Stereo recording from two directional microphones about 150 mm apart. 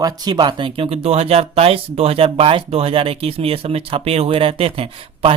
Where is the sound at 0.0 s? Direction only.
30° right (ahead or behind).